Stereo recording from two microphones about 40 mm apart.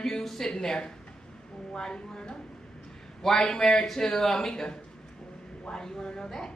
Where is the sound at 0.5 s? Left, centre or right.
Centre.